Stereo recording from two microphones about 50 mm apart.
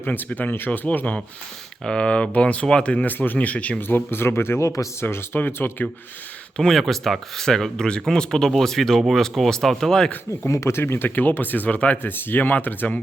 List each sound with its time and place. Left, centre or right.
0.0 s speech: left
0.9 s speech: left
1.8 s speech: centre
3.1 s speech: left
3.3 s speech: left
3.8 s speech: left
6.6 s speech: centre
10.4 s speech: left
12.0 s speech: left